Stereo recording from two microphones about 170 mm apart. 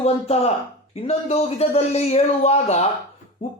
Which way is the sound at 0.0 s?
40° left (ahead or behind).